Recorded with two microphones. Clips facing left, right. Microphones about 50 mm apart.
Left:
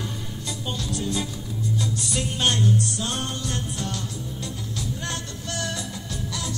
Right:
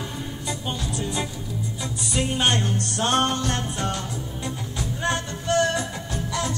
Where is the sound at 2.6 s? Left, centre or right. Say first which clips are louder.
Left 2 dB; right.